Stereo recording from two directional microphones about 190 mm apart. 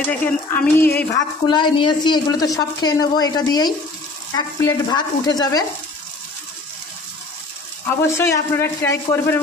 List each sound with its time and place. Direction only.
0.1 s a man's voice: 10° left (ahead or behind)
1.5 s speech: 25° left (ahead or behind)
8.1 s a man's voice: 15° left (ahead or behind)